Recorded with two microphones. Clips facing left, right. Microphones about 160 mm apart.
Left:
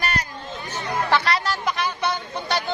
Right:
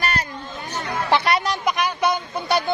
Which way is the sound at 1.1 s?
20° right (ahead or behind).